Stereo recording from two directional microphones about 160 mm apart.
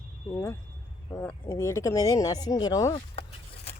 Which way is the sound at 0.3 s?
15° left (ahead or behind).